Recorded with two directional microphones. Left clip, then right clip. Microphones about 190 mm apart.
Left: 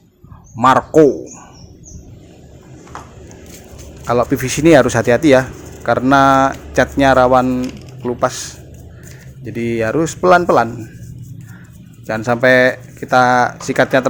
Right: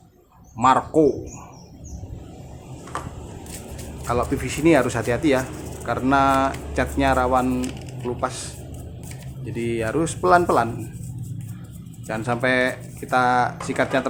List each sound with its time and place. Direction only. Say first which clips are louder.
0.6 s speech: left 7 dB; 25° left (ahead or behind)
4.0 s speech: left 8 dB; 25° left (ahead or behind)
12.0 s speech: left 10 dB; 25° left (ahead or behind)